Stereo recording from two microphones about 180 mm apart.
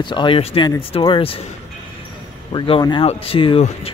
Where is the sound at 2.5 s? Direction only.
25° left (ahead or behind).